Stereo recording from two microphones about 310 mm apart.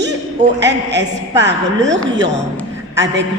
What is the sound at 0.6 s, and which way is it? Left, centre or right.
A man's voice, right.